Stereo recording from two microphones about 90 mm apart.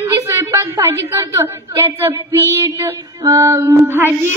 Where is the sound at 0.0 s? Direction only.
30° right (ahead or behind).